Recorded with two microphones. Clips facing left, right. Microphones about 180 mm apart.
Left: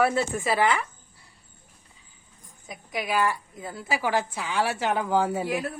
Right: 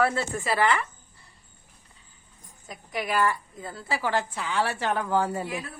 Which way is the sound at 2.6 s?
10° left (ahead or behind).